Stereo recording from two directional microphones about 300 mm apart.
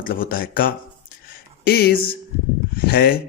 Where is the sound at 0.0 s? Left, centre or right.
Left.